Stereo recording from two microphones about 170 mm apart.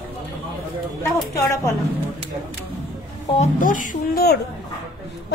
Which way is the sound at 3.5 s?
50° left (ahead or behind).